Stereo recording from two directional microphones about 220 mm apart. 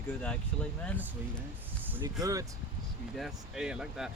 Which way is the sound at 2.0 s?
15° right (ahead or behind).